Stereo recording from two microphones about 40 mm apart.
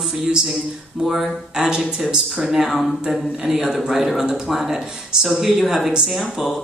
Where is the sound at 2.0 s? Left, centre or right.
Centre.